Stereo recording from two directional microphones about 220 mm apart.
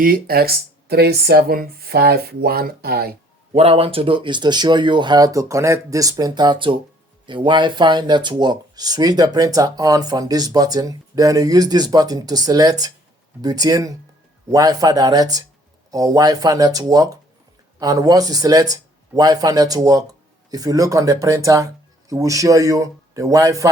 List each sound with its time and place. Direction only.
0.0 s speech: 40° right (ahead or behind)
3.5 s speech: 25° right (ahead or behind)